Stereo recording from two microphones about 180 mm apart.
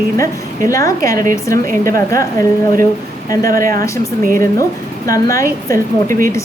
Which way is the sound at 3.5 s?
50° right (ahead or behind).